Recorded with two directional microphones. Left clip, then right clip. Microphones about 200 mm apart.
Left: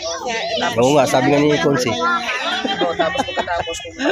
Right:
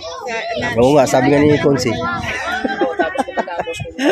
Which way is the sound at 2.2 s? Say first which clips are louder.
Even; 30° right (ahead or behind).